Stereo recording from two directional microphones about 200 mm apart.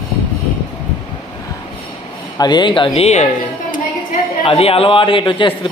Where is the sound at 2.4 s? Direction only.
20° left (ahead or behind).